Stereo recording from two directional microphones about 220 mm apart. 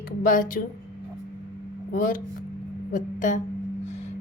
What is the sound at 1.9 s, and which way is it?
A woman's voice, 40° left (ahead or behind).